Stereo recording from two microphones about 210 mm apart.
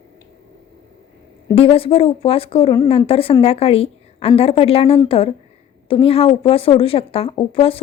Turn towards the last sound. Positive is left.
turn(degrees=25)  # may be behind; listen again after turning